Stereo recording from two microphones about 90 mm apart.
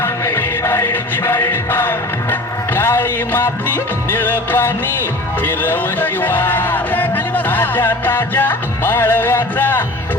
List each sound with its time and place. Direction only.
0.0 s music: 30° left (ahead or behind)
5.5 s speech: 20° left (ahead or behind)